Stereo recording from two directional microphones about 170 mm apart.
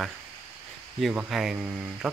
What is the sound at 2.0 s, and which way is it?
Music, centre (ahead or behind).